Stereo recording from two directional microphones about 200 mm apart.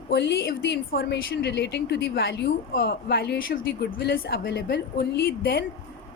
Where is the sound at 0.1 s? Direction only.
60° left (ahead or behind).